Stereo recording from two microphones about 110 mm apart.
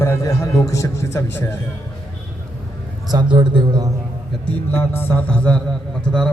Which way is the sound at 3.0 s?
40° right (ahead or behind).